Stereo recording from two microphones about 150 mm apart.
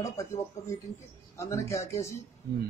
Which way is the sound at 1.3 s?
20° left (ahead or behind).